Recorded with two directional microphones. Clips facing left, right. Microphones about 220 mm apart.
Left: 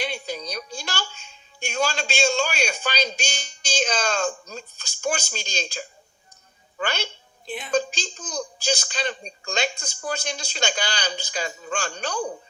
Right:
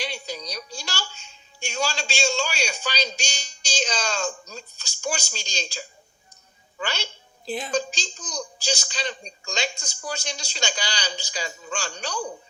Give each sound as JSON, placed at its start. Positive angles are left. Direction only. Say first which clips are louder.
{"t": 0.0, "sound": "a woman's voice", "louder": "left 3 dB", "side_deg": 55}
{"t": 7.4, "sound": "a woman's voice", "louder": "right 4 dB", "side_deg": -35}
{"t": 7.8, "sound": "speech", "louder": "left 2 dB", "side_deg": 55}